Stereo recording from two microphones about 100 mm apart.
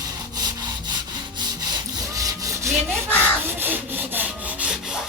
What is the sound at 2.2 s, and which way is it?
Rub, 35° right (ahead or behind).